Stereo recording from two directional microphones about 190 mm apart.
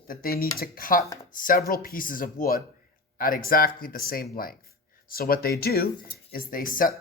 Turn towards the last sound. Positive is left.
turn(degrees=45)  # may be behind; listen again after turning